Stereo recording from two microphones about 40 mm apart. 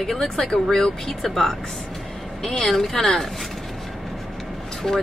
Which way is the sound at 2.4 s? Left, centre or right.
Centre.